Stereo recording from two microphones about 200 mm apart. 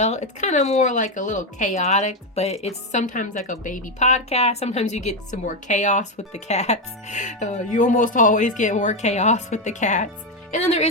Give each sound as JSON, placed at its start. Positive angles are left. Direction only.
{"t": 0.0, "sound": "speech", "side_deg": 35}